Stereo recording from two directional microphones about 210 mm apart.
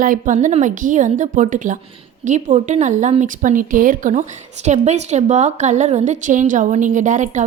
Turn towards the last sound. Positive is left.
turn(degrees=-35)  # may be behind; listen again after turning